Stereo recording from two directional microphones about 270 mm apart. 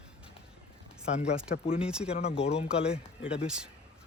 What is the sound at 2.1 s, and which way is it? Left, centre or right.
Speech, left.